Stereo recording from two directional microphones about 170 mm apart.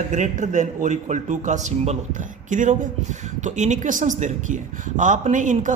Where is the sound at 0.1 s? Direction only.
50° right (ahead or behind).